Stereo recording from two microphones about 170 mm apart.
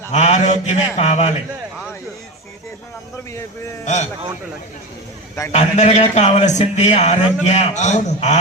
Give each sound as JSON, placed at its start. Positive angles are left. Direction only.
{"t": 0.1, "sound": "a man's voice", "side_deg": 40}
{"t": 3.8, "sound": "a man's voice", "side_deg": 45}
{"t": 5.5, "sound": "a man's voice", "side_deg": 40}